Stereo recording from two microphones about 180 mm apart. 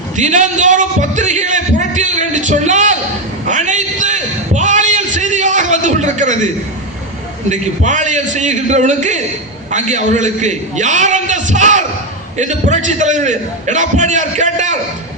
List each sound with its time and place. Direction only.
0.2 s a man's voice: 40° right (ahead or behind)
3.4 s a sound: 45° right (ahead or behind)
7.5 s a man's voice: 45° right (ahead or behind)